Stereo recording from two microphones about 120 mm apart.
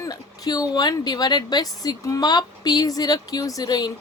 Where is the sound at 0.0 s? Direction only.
30° left (ahead or behind).